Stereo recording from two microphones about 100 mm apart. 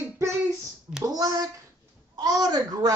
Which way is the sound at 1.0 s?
40° right (ahead or behind).